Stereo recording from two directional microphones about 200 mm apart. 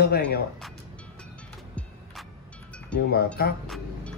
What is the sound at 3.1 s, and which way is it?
Speech, 50° left (ahead or behind).